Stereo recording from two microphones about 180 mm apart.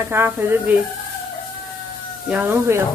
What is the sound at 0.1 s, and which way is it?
Speech, 10° right (ahead or behind).